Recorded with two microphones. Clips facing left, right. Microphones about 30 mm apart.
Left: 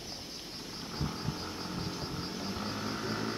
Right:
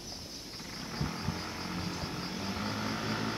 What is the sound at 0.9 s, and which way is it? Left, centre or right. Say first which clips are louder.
Vehicle: right 1 dB; centre.